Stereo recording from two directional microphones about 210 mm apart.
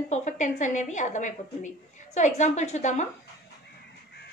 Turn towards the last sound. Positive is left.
turn(degrees=35)  # may be behind; listen again after turning